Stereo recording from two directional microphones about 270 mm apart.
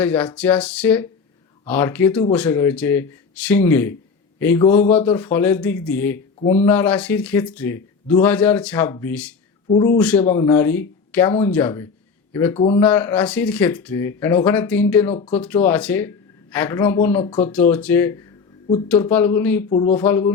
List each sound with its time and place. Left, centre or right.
0.0 s a man's voice: centre
9.6 s speech: centre
10.0 s speech: centre
12.5 s speech: centre
12.8 s speech: centre
19.7 s speech: centre
20.0 s speech: centre